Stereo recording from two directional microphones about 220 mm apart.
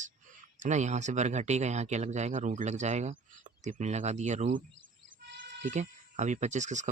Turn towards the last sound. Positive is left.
turn(degrees=-35)  # may be behind; listen again after turning